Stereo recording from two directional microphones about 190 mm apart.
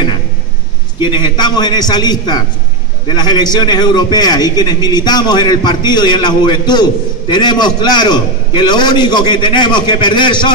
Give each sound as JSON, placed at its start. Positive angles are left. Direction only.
{"t": 0.9, "sound": "a man's voice", "side_deg": 25}